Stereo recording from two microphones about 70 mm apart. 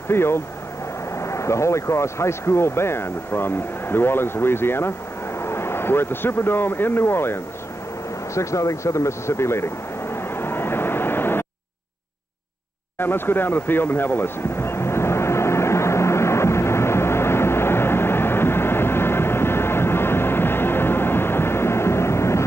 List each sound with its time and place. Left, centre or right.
0.1 s speech: left
8.4 s vehicle: left
13.0 s a sound: left